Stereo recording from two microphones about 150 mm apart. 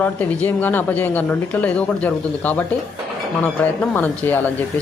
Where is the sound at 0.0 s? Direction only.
10° left (ahead or behind).